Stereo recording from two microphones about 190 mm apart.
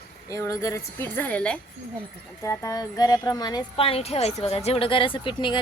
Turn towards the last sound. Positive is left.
turn(degrees=25)  # may be behind; listen again after turning